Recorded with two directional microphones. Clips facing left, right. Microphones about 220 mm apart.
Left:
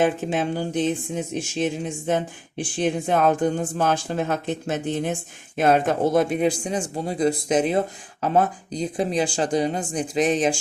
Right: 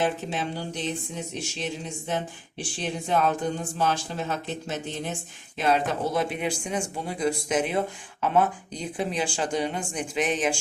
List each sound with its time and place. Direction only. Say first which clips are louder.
0.0 s speech: left 6 dB; 50° left (ahead or behind)